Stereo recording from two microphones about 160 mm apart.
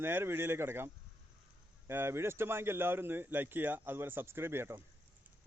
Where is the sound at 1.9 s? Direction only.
15° right (ahead or behind).